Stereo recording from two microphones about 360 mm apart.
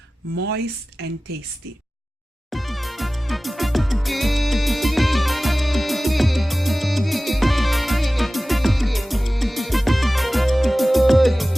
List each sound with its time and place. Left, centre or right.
0.4 s speech: right
2.5 s music: centre